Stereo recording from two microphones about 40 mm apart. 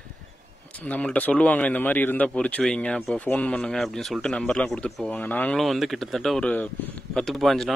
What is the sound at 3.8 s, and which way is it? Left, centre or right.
Speech, centre.